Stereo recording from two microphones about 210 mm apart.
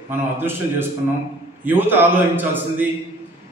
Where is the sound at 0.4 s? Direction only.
10° right (ahead or behind).